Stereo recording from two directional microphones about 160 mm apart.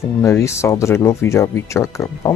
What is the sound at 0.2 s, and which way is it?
Speech, 15° left (ahead or behind).